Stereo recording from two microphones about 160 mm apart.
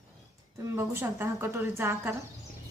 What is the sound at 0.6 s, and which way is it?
A woman's voice, 15° right (ahead or behind).